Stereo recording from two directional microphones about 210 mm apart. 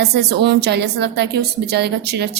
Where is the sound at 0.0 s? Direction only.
50° right (ahead or behind).